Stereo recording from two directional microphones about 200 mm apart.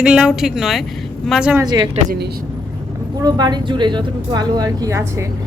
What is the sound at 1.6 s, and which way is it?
Speech, 20° right (ahead or behind).